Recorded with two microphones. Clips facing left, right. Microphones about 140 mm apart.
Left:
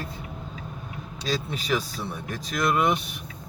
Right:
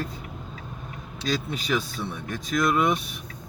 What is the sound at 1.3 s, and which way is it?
Speech, centre (ahead or behind).